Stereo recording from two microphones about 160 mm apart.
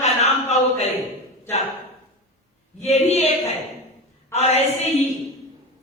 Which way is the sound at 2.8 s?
40° left (ahead or behind).